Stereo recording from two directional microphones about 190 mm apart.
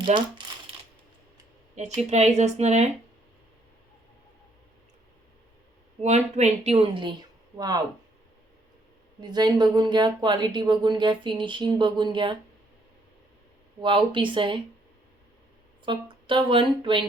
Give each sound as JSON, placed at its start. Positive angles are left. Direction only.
{"t": 0.0, "sound": "speech", "side_deg": -25}
{"t": 1.7, "sound": "speech", "side_deg": -35}
{"t": 6.0, "sound": "speech", "side_deg": -35}
{"t": 9.3, "sound": "speech", "side_deg": -20}
{"t": 13.8, "sound": "speech", "side_deg": -25}
{"t": 15.9, "sound": "speech", "side_deg": -25}